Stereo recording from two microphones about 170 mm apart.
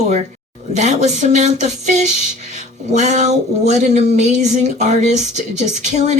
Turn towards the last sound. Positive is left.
turn(degrees=-45)  # may be behind; listen again after turning